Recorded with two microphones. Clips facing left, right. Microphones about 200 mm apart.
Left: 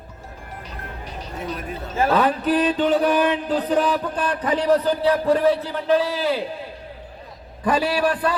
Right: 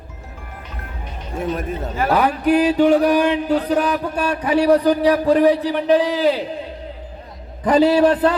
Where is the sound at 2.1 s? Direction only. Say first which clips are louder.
Right 4 dB; 15° right (ahead or behind).